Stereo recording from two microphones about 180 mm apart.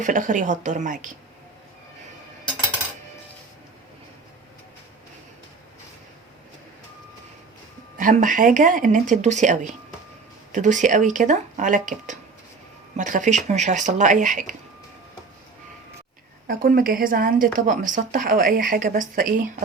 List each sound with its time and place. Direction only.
0.0 s speech: 45° right (ahead or behind)
7.9 s speech: 45° right (ahead or behind)
16.5 s speech: 55° right (ahead or behind)